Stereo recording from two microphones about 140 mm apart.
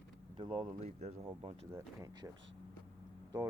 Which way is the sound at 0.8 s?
55° right (ahead or behind).